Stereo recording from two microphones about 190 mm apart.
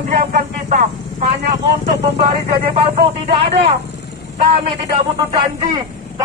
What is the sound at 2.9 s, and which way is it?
Speech, 30° right (ahead or behind).